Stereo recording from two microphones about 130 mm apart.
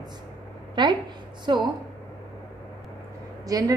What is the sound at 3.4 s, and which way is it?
Speech, 25° right (ahead or behind).